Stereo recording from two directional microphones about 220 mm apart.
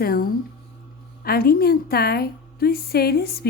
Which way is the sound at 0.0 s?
40° left (ahead or behind).